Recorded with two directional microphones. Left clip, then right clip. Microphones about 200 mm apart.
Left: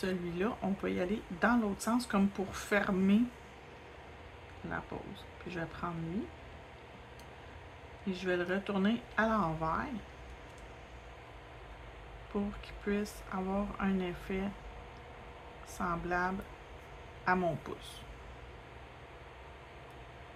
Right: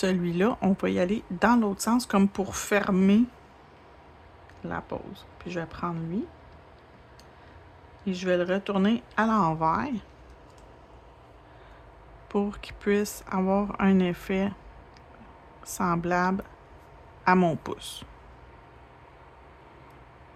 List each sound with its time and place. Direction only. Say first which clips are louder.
0.0 s speech: right 10 dB; 50° right (ahead or behind)
4.7 s speech: right 7 dB; 45° right (ahead or behind)
8.0 s speech: right 8 dB; 45° right (ahead or behind)
12.3 s speech: right 10 dB; 50° right (ahead or behind)
15.6 s speech: right 9 dB; 50° right (ahead or behind)